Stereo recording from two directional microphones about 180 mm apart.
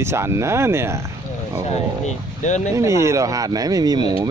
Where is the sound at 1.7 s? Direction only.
40° left (ahead or behind).